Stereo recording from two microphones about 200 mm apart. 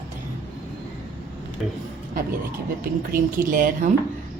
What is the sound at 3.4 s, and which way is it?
Speech, 45° right (ahead or behind).